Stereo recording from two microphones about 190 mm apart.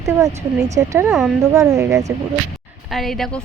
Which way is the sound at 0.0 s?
15° right (ahead or behind).